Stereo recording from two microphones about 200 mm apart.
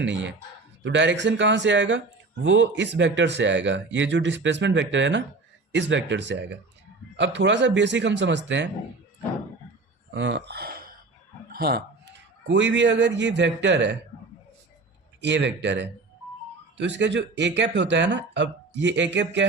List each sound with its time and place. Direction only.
0.0 s speech: 65° right (ahead or behind)
10.2 s speech: 65° right (ahead or behind)
12.5 s speech: 65° right (ahead or behind)
15.2 s speech: 60° right (ahead or behind)